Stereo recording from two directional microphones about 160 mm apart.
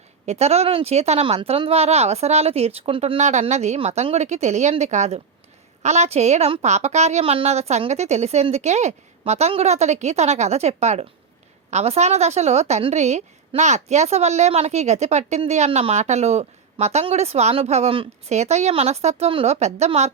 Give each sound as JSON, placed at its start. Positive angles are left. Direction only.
{"t": 0.3, "sound": "speech", "side_deg": -40}
{"t": 3.2, "sound": "a woman's voice", "side_deg": -45}